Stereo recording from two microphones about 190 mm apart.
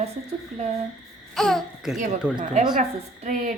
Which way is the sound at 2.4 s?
40° right (ahead or behind).